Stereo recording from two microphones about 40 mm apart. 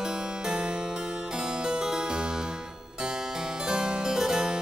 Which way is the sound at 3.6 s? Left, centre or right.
Centre.